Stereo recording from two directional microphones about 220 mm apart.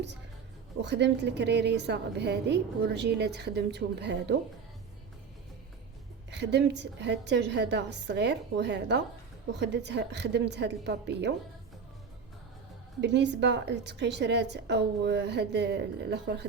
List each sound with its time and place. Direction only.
0.8 s a woman's voice: 50° right (ahead or behind)
6.3 s a woman's voice: 50° right (ahead or behind)
13.0 s a woman's voice: 50° right (ahead or behind)